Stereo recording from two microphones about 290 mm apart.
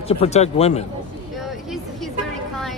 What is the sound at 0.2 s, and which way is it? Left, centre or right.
Speech, left.